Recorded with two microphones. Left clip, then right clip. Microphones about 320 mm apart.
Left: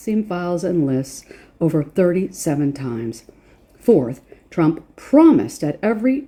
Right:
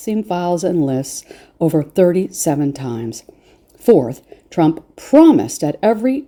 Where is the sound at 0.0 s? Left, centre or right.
Right.